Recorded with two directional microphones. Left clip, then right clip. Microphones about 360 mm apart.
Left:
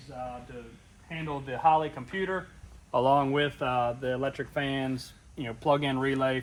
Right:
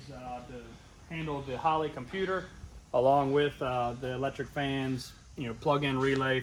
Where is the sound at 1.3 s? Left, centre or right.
Left.